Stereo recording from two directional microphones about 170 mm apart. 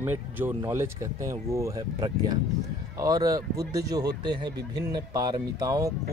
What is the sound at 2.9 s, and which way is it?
Speech, 20° right (ahead or behind).